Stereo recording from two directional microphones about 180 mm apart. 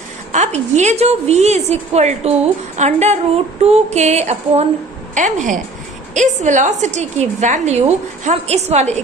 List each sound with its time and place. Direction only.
0.3 s a woman's voice: 40° right (ahead or behind)